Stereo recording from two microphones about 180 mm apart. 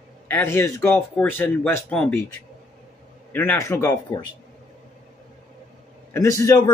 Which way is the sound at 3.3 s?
10° left (ahead or behind).